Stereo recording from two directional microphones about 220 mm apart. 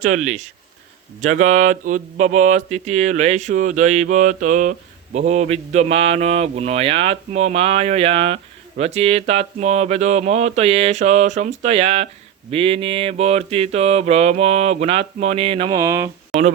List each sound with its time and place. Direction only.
0.0 s a sound: 35° right (ahead or behind)
5.1 s mantra: 30° right (ahead or behind); by 16.0 s 15° right (ahead or behind)
16.3 s speech: centre (ahead or behind)